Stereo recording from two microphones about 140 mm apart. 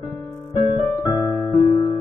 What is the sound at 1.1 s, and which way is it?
Keyboard, 25° left (ahead or behind).